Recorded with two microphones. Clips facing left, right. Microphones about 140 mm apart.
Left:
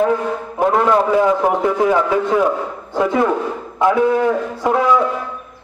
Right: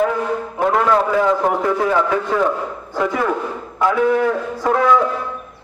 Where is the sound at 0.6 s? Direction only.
20° left (ahead or behind).